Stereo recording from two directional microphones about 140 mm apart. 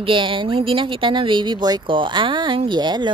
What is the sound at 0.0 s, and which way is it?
Speech, 35° right (ahead or behind).